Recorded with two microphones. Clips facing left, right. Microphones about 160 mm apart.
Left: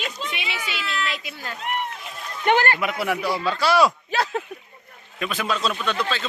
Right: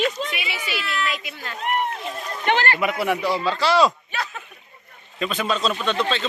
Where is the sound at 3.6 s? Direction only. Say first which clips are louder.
Even; 10° left (ahead or behind).